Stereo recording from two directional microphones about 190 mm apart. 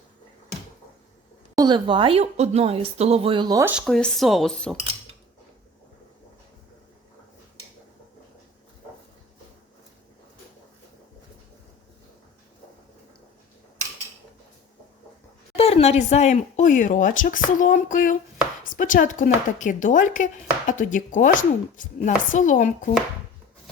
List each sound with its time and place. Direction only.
1.5 s speech: 25° right (ahead or behind)
3.7 s speech: centre (ahead or behind)
15.5 s a woman's voice: 30° left (ahead or behind)